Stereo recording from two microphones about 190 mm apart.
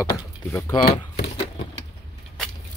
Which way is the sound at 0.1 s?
15° left (ahead or behind).